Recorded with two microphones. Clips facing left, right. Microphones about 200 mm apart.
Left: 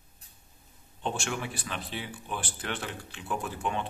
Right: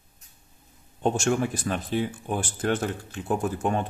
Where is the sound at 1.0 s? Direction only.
45° right (ahead or behind).